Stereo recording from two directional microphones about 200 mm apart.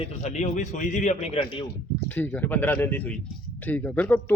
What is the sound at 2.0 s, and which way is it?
A man's voice, 10° left (ahead or behind).